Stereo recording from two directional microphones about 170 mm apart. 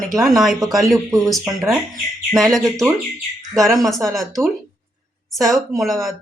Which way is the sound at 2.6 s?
20° right (ahead or behind).